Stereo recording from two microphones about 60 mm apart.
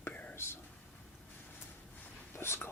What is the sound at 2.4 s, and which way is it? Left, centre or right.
Speech, left.